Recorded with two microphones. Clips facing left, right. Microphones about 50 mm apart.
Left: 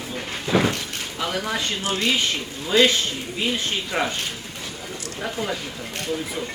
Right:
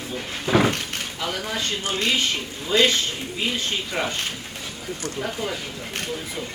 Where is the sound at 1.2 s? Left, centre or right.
Left.